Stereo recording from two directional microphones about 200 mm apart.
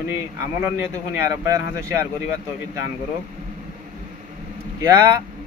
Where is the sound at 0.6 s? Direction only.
15° right (ahead or behind).